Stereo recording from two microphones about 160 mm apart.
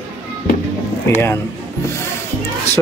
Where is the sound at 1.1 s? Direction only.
15° left (ahead or behind).